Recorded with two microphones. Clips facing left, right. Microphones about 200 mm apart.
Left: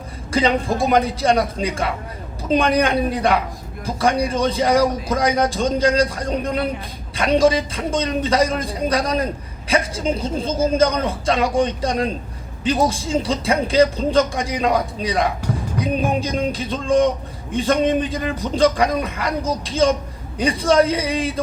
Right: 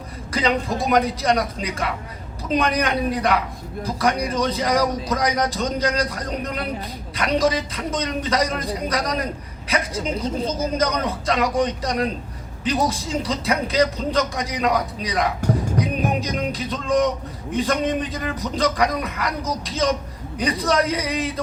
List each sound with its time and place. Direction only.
0.3 s a man's voice: 30° left (ahead or behind)